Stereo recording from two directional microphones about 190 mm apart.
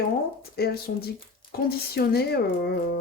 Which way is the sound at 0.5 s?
55° left (ahead or behind).